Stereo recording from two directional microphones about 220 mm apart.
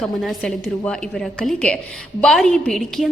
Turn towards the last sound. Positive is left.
turn(degrees=0)  # may be behind; listen again after turning